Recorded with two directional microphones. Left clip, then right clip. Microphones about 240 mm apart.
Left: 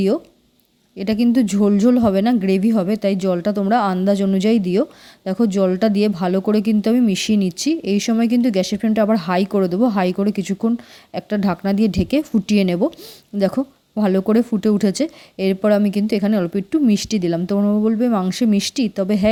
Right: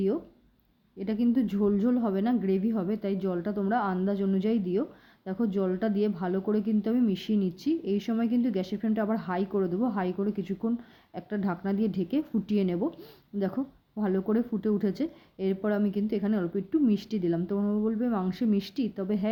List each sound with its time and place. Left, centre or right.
0.9 s speech: left